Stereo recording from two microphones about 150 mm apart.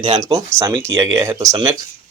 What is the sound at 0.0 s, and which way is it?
Speech, 30° right (ahead or behind).